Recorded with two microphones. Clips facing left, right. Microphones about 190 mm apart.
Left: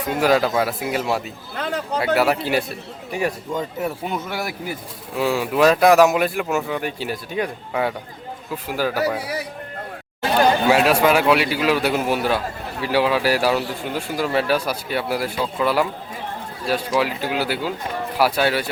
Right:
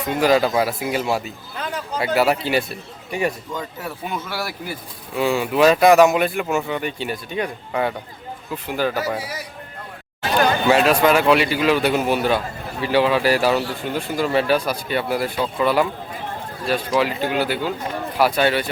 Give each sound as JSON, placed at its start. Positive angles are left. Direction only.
{"t": 0.1, "sound": "speech", "side_deg": 0}
{"t": 1.5, "sound": "a sound", "side_deg": 65}
{"t": 2.1, "sound": "speech", "side_deg": 0}
{"t": 4.1, "sound": "speech", "side_deg": 20}
{"t": 5.1, "sound": "speech", "side_deg": 0}
{"t": 10.7, "sound": "speech", "side_deg": 5}